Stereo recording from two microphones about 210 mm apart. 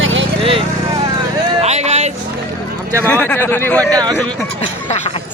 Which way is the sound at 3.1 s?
10° left (ahead or behind).